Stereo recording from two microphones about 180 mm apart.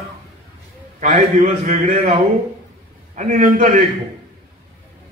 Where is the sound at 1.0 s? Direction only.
45° right (ahead or behind).